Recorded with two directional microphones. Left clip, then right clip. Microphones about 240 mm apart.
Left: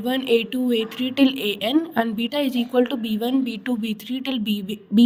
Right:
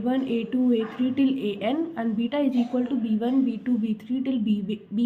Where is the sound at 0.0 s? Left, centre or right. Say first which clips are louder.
Left 6 dB; left.